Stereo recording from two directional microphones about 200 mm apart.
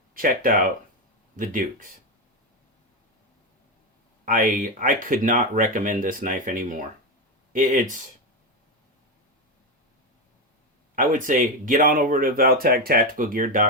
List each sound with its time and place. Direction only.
0.1 s speech: 45° right (ahead or behind)
4.3 s speech: 45° right (ahead or behind)
10.9 s speech: 40° right (ahead or behind)